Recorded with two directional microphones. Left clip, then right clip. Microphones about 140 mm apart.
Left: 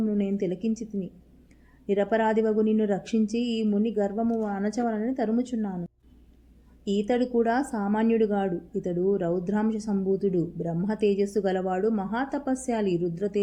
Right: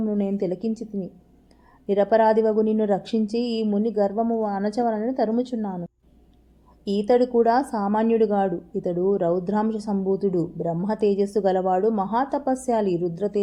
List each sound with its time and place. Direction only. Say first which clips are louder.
0.0 s a woman's voice: right 3 dB; 25° right (ahead or behind)
6.8 s a woman's voice: right 6 dB; 25° right (ahead or behind)